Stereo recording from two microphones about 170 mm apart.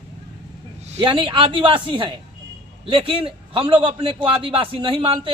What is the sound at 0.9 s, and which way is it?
A man's voice, 30° right (ahead or behind).